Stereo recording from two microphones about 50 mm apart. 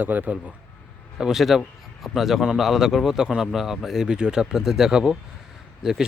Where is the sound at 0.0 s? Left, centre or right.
Right.